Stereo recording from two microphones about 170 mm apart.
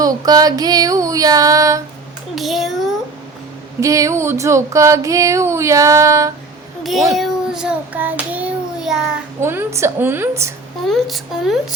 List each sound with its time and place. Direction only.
0.0 s music: 20° right (ahead or behind)
2.3 s child singing: centre (ahead or behind)
3.8 s a sound: 20° right (ahead or behind)
6.8 s a child's voice: centre (ahead or behind)
9.4 s a sound: 15° right (ahead or behind)
10.8 s speech: centre (ahead or behind)